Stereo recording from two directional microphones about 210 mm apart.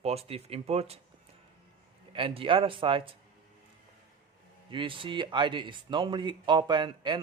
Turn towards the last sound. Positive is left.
turn(degrees=-20)  # may be behind; listen again after turning